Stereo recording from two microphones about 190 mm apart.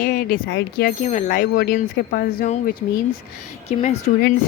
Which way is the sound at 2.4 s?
40° left (ahead or behind).